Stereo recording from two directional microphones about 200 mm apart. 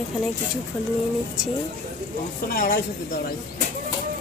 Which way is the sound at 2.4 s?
45° left (ahead or behind).